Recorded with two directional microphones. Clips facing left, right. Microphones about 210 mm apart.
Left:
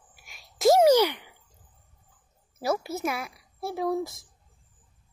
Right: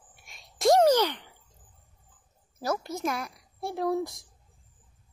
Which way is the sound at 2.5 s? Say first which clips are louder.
Left 3 dB; 10° left (ahead or behind).